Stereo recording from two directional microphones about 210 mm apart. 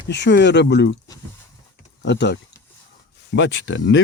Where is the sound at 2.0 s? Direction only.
55° left (ahead or behind).